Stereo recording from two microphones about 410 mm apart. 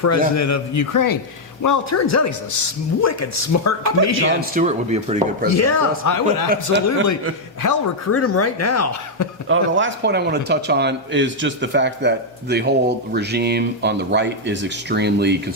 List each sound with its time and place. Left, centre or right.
0.0 s a man's voice: left
4.1 s speech: right
5.5 s a man's voice: left
7.6 s a man's voice: left
8.1 s a man's voice: left
9.5 s speech: right